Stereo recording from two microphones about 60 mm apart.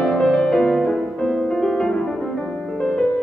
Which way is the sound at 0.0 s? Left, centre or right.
Centre.